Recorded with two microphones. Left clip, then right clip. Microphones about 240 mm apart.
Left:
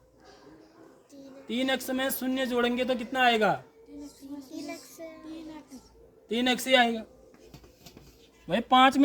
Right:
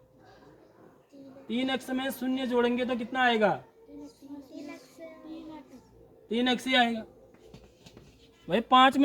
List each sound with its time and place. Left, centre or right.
1.5 s a man's voice: left
4.4 s child singing: left
6.2 s a man's voice: left
8.4 s speech: centre